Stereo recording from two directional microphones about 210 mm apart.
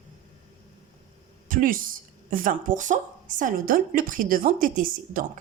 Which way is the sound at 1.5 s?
40° right (ahead or behind).